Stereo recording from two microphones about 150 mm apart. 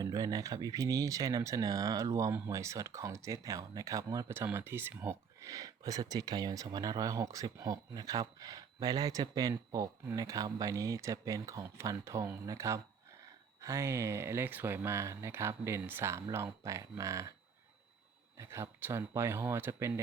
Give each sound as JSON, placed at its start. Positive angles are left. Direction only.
{"t": 0.0, "sound": "speech", "side_deg": -25}
{"t": 18.3, "sound": "speech", "side_deg": -20}